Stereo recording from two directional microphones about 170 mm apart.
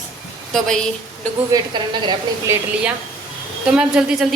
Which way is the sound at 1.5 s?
25° right (ahead or behind).